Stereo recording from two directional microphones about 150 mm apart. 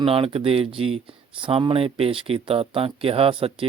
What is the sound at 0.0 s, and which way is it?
Speech, 40° right (ahead or behind).